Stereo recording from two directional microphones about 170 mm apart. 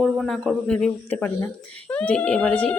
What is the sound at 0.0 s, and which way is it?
Speech, centre (ahead or behind).